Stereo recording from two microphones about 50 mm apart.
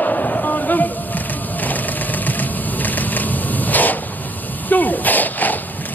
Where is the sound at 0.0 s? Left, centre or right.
Left.